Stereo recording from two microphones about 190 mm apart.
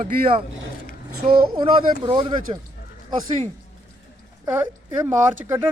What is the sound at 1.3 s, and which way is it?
Speech, 50° right (ahead or behind).